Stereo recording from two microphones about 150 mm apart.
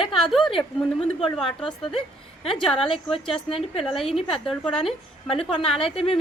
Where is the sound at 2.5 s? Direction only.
Centre (ahead or behind).